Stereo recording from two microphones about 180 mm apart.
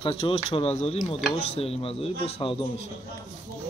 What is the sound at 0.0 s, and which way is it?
A man's voice, 30° left (ahead or behind).